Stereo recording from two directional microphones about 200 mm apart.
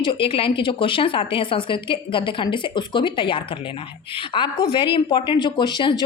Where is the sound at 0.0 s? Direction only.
25° left (ahead or behind).